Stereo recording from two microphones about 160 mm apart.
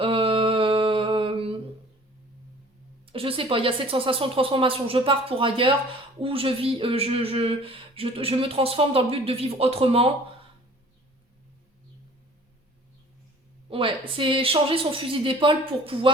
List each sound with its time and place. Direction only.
0.0 s mantra: 35° right (ahead or behind)
3.1 s speech: 35° right (ahead or behind)
13.7 s a sound: 35° right (ahead or behind)
14.2 s speech: 35° right (ahead or behind)